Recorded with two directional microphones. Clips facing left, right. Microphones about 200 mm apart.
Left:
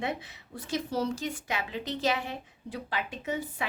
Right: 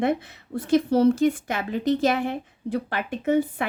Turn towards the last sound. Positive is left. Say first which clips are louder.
# right 11 dB
turn(degrees=-55)  # may be behind; listen again after turning